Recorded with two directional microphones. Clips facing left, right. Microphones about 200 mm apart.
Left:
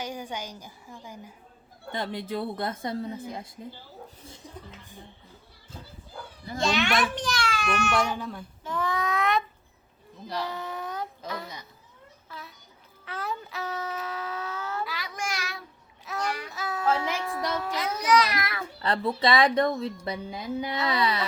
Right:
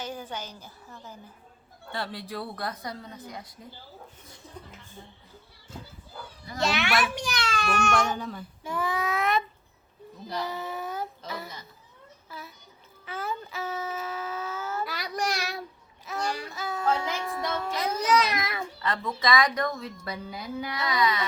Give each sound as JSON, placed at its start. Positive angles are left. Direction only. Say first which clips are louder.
{"t": 0.0, "sound": "a woman's voice", "louder": "left 1 dB", "side_deg": 15}
{"t": 4.4, "sound": "a sound", "louder": "even", "side_deg": 15}
{"t": 6.6, "sound": "a child's voice", "louder": "left 1 dB", "side_deg": -5}
{"t": 7.6, "sound": "speech", "louder": "right 1 dB", "side_deg": -40}
{"t": 8.1, "sound": "a child's voice", "louder": "even", "side_deg": 0}
{"t": 13.1, "sound": "child singing", "louder": "even", "side_deg": 0}
{"t": 14.8, "sound": "child singing", "louder": "right 4 dB", "side_deg": -40}
{"t": 16.5, "sound": "music", "louder": "left 2 dB", "side_deg": 0}
{"t": 17.7, "sound": "a sound", "louder": "left 1 dB", "side_deg": -25}
{"t": 18.8, "sound": "speech", "louder": "left 5 dB", "side_deg": 30}